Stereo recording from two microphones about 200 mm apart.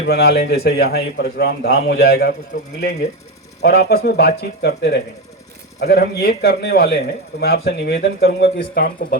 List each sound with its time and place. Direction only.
0.0 s speech: 50° left (ahead or behind)
3.6 s speech: 50° left (ahead or behind)